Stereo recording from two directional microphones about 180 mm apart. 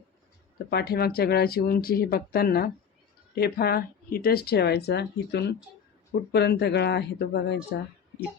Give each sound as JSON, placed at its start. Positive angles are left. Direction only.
{"t": 0.7, "sound": "speech", "side_deg": 65}